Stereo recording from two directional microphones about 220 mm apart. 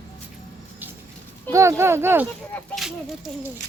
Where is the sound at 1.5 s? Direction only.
10° right (ahead or behind).